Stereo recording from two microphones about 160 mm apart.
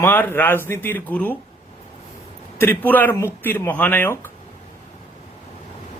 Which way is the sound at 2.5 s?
10° left (ahead or behind).